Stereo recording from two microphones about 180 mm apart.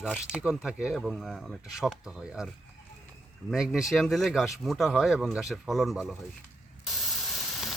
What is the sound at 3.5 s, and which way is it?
Speech, centre (ahead or behind).